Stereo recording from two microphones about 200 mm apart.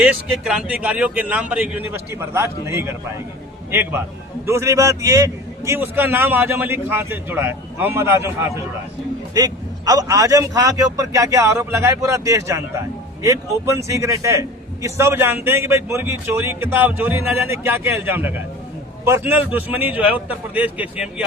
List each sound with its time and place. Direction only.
0.0 s a man's voice: 5° right (ahead or behind)